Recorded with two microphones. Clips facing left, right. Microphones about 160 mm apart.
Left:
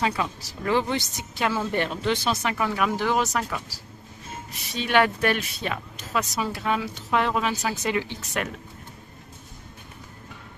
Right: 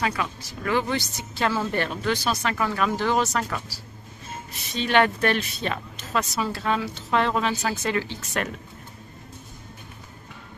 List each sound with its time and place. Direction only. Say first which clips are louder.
0.0 s speech: left 1 dB; 25° left (ahead or behind)
4.7 s speech: right 1 dB; 10° left (ahead or behind)